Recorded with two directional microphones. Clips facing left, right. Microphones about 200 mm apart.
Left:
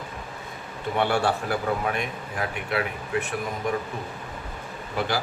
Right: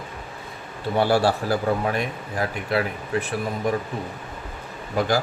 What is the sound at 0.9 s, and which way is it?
Speech, 35° right (ahead or behind).